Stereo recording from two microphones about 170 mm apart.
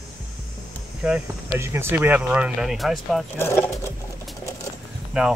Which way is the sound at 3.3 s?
15° left (ahead or behind).